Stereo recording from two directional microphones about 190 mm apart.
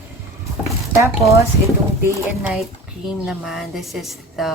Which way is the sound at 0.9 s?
15° right (ahead or behind).